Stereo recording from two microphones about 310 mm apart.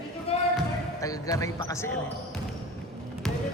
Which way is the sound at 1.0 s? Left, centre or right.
Centre.